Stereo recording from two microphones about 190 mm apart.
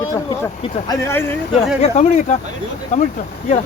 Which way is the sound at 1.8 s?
35° left (ahead or behind).